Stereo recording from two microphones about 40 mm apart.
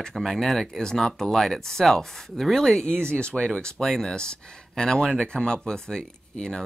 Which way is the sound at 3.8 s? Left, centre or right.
Centre.